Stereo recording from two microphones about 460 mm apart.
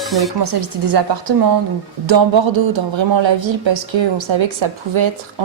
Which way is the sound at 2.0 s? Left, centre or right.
Right.